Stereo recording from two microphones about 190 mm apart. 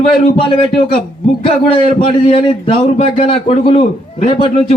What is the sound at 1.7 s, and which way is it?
A man's voice, 25° left (ahead or behind).